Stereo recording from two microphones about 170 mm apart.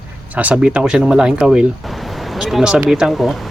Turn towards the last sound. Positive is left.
turn(degrees=0)  # may be behind; listen again after turning